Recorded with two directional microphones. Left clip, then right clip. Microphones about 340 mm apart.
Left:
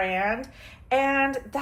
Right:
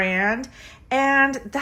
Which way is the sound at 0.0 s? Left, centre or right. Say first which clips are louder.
Right 4 dB; right.